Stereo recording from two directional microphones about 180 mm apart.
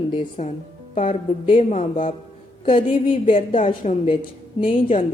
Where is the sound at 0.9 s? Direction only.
45° left (ahead or behind).